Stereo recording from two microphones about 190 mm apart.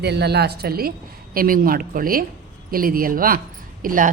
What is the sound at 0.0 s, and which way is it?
A woman's voice, 60° right (ahead or behind).